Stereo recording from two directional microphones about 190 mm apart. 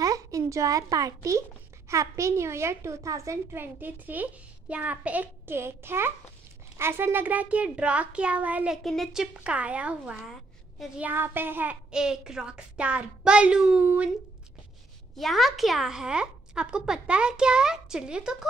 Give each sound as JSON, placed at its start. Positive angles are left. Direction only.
{"t": 0.0, "sound": "a child's voice", "side_deg": -15}
{"t": 15.1, "sound": "speech", "side_deg": 0}